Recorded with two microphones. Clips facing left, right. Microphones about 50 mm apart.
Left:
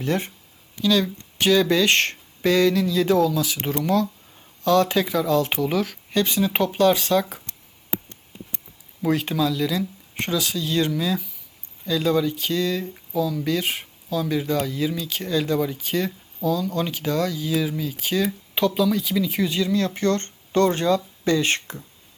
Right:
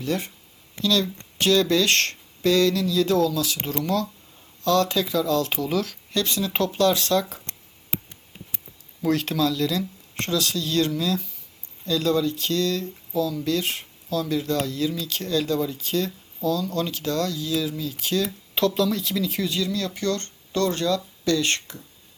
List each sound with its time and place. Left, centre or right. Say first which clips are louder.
0.0 s speech: left 2 dB; left
0.8 s speech: left 2 dB; centre
9.0 s speech: left 1 dB; centre